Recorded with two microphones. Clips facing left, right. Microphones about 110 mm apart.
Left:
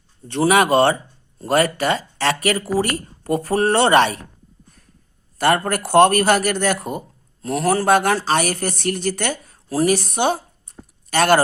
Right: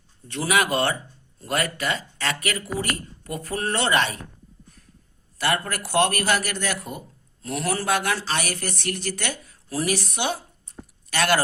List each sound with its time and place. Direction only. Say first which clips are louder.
0.3 s speech: left 7 dB; 30° left (ahead or behind)
3.2 s speech: left 12 dB; 55° left (ahead or behind)
3.5 s speech: left 8 dB; 35° left (ahead or behind)
5.4 s speech: left 7 dB; 45° left (ahead or behind)